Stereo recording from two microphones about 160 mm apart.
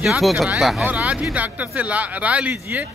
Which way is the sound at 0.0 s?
Centre (ahead or behind).